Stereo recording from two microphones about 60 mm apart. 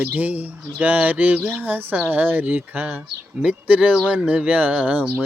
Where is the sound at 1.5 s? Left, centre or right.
Right.